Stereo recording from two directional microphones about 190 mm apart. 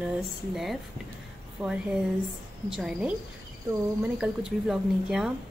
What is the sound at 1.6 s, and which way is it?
A woman's voice, 5° right (ahead or behind).